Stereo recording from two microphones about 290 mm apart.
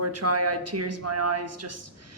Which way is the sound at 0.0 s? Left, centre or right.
Right.